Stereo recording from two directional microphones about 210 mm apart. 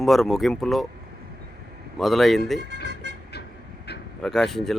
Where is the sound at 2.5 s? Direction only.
55° right (ahead or behind).